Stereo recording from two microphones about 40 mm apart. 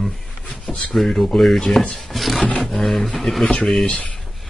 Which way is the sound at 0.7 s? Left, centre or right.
Left.